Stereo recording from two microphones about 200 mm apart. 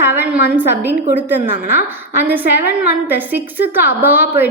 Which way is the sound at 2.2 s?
10° right (ahead or behind).